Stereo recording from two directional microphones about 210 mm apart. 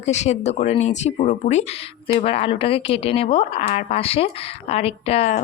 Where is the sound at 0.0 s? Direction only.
30° left (ahead or behind).